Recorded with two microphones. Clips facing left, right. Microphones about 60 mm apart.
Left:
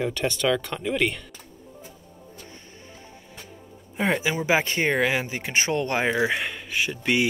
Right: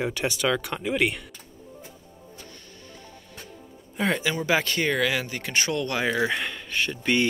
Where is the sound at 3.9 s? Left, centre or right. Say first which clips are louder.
Left 1 dB; left.